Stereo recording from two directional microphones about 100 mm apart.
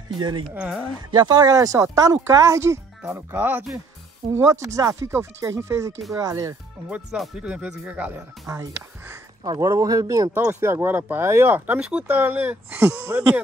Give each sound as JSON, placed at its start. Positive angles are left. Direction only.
{"t": 0.6, "sound": "speech", "side_deg": -5}
{"t": 1.1, "sound": "speech", "side_deg": -45}
{"t": 3.1, "sound": "speech", "side_deg": -20}
{"t": 4.3, "sound": "speech", "side_deg": -30}
{"t": 6.9, "sound": "speech", "side_deg": -5}
{"t": 8.5, "sound": "speech", "side_deg": -30}
{"t": 9.4, "sound": "speech", "side_deg": -40}